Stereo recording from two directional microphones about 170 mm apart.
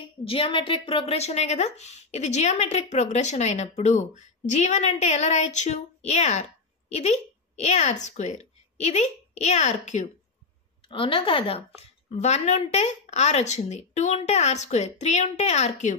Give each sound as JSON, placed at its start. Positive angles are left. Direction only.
{"t": 0.2, "sound": "a woman's voice", "side_deg": 30}
{"t": 10.9, "sound": "a woman's voice", "side_deg": 30}